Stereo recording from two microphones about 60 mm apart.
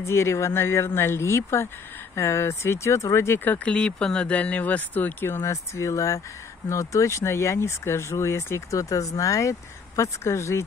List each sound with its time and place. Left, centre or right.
0.0 s speech: left
3.3 s speech: left
3.6 s speech: centre; by 5.3 s left
5.3 s speech: left